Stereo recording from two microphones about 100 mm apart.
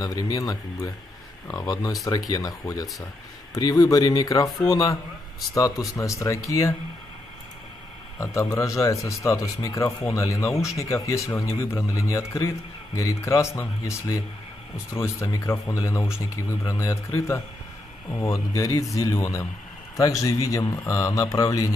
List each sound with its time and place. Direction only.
0.0 s speech: 35° left (ahead or behind)
8.4 s a man's voice: 30° left (ahead or behind)